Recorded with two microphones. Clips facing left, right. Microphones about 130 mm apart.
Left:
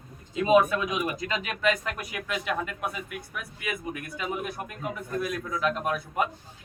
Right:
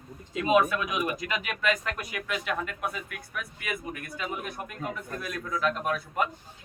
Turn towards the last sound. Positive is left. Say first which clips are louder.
# left 1 dB
turn(degrees=5)  # may be behind; listen again after turning